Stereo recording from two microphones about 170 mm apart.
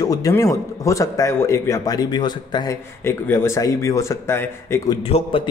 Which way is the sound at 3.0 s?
15° left (ahead or behind).